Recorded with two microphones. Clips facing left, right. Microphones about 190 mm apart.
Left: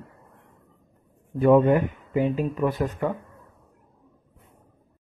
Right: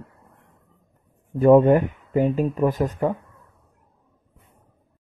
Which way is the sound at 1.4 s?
40° right (ahead or behind).